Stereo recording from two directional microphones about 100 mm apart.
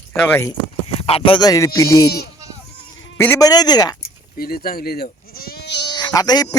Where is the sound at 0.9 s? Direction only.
75° left (ahead or behind).